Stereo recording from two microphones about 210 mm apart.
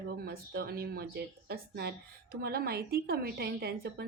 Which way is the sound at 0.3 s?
50° right (ahead or behind).